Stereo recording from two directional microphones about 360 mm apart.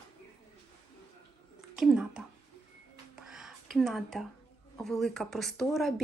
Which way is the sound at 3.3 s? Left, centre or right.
Centre.